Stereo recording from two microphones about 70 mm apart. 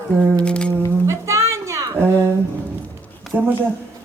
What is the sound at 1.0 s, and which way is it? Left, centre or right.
Music, right.